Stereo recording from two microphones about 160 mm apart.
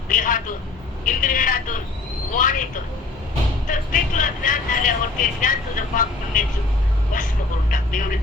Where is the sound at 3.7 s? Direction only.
55° left (ahead or behind).